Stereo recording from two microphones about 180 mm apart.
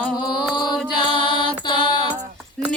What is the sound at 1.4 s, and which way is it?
Mantra, 25° left (ahead or behind).